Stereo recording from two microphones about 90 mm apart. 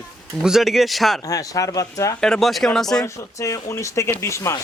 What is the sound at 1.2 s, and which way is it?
Speech, 40° left (ahead or behind).